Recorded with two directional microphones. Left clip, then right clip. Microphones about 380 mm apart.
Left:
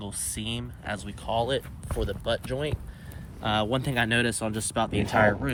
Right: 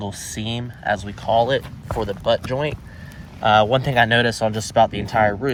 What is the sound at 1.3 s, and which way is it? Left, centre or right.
Speech, right.